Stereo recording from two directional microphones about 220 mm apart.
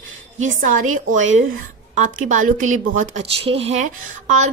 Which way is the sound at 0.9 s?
35° right (ahead or behind).